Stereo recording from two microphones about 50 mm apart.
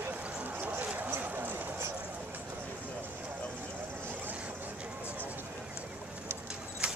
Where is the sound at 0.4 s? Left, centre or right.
Right.